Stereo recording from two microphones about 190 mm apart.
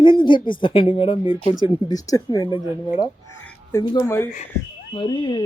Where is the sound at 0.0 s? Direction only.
25° left (ahead or behind).